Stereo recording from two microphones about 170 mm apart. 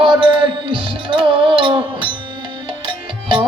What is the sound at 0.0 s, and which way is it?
Music, 30° right (ahead or behind).